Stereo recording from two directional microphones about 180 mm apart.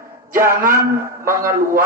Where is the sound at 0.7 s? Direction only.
50° right (ahead or behind).